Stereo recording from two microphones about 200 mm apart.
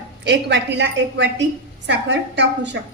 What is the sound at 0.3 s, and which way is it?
A woman's voice, 60° right (ahead or behind).